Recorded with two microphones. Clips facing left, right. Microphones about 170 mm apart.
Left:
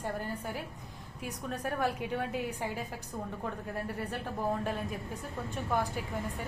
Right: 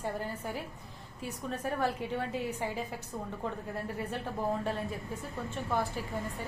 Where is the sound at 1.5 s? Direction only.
5° left (ahead or behind).